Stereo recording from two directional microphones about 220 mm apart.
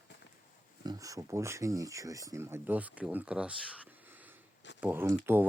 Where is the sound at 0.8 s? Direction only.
15° right (ahead or behind).